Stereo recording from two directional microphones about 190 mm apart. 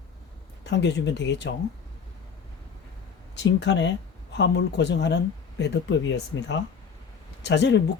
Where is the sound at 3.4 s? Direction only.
70° left (ahead or behind).